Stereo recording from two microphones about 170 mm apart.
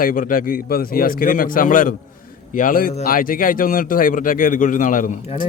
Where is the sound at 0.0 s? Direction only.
55° left (ahead or behind).